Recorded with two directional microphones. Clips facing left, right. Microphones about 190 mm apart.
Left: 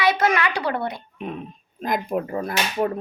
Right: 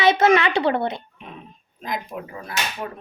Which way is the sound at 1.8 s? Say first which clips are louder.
Left 6 dB; 50° left (ahead or behind).